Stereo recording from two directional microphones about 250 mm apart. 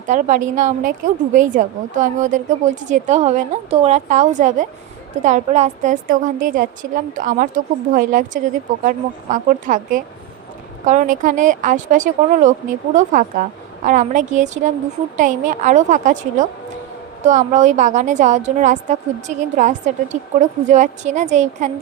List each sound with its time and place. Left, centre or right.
0.1 s a woman's voice: right